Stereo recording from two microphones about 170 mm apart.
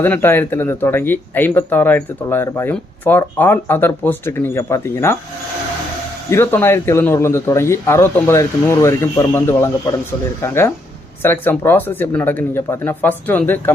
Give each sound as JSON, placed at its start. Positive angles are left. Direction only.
{"t": 0.0, "sound": "speech", "side_deg": 15}
{"t": 6.3, "sound": "speech", "side_deg": 15}